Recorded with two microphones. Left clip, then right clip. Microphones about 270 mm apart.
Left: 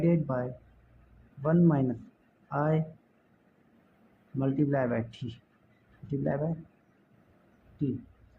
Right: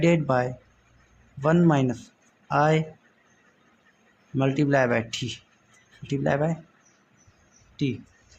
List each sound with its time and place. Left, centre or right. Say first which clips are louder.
0.0 s a man's voice: right 8 dB; right
4.4 s speech: right 7 dB; right